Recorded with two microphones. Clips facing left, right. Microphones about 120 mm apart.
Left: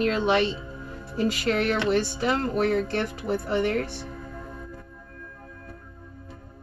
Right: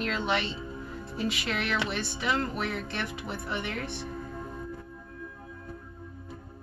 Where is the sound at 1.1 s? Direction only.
40° left (ahead or behind).